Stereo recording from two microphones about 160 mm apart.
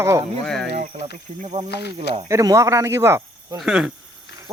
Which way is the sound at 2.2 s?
20° right (ahead or behind).